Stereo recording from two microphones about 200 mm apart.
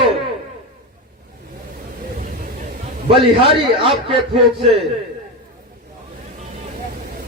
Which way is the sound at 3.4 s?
30° right (ahead or behind).